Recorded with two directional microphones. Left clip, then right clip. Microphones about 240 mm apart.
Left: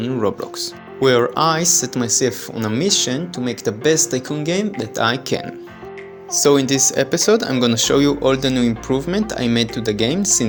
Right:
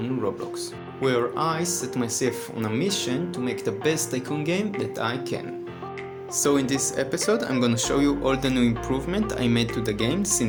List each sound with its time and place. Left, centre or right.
0.0 s speech: left
6.4 s speech: left